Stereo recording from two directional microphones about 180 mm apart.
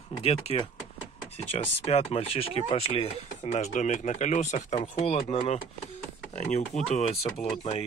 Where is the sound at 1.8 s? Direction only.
35° left (ahead or behind).